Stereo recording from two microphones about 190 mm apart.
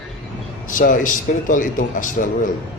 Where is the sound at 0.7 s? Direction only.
45° left (ahead or behind).